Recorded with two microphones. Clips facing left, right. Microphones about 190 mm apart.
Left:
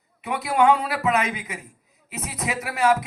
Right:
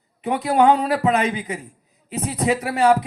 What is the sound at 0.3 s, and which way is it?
Speech, 35° right (ahead or behind).